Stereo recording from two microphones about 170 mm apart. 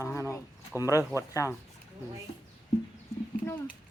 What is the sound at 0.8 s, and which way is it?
Speech, 20° left (ahead or behind).